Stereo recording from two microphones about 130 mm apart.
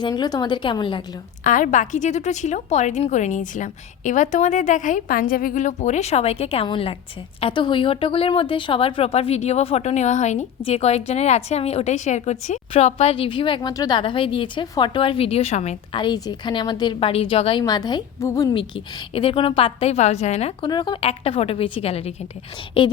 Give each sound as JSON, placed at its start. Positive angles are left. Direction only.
{"t": 0.0, "sound": "a woman's voice", "side_deg": 35}
{"t": 1.5, "sound": "a woman's voice", "side_deg": 90}
{"t": 10.6, "sound": "a woman's voice", "side_deg": 50}
{"t": 13.6, "sound": "a woman's voice", "side_deg": 30}
{"t": 15.9, "sound": "a woman's voice", "side_deg": 35}
{"t": 17.6, "sound": "a woman's voice", "side_deg": 30}
{"t": 19.1, "sound": "speech", "side_deg": 45}
{"t": 20.6, "sound": "speech", "side_deg": 35}
{"t": 22.8, "sound": "a woman's voice", "side_deg": 40}